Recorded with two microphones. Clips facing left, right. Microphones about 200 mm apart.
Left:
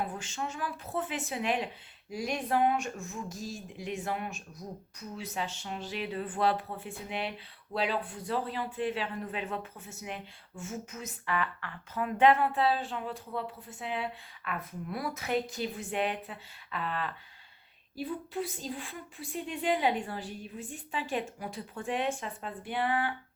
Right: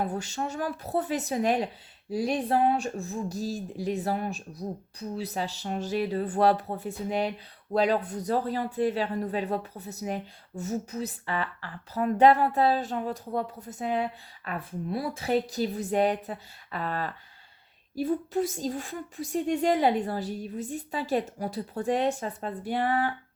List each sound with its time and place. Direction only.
0.0 s speech: 40° right (ahead or behind)